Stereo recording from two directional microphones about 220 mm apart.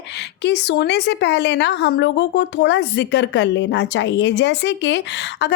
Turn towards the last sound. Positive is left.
turn(degrees=50)  # may be behind; listen again after turning